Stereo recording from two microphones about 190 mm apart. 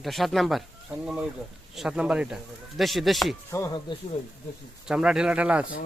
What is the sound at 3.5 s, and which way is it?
Speech, 15° left (ahead or behind).